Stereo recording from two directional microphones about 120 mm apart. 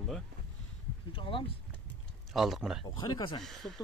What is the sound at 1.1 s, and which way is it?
Speech, 45° left (ahead or behind).